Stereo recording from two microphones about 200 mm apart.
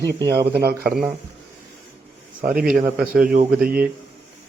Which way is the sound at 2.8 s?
45° right (ahead or behind).